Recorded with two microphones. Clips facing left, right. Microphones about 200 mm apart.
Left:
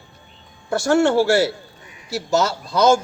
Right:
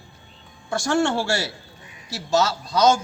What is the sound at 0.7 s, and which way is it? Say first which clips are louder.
A man's voice: left 5 dB; 60° left (ahead or behind).